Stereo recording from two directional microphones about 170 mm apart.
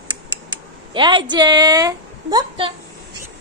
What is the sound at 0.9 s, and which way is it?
A woman's voice, 25° right (ahead or behind).